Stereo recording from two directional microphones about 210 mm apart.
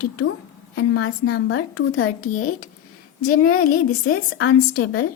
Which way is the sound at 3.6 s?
45° left (ahead or behind).